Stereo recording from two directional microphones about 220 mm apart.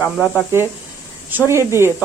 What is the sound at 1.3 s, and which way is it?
Speech, 10° right (ahead or behind).